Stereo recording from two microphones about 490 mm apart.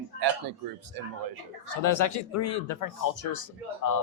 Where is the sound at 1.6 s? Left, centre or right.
Left.